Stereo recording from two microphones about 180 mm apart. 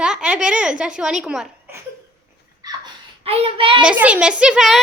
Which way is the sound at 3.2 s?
35° right (ahead or behind).